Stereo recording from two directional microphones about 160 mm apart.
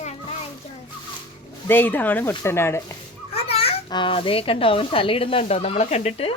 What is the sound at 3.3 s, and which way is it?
A child's voice, 40° left (ahead or behind).